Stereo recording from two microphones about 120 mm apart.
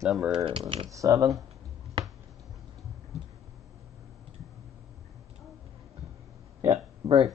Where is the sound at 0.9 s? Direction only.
30° right (ahead or behind).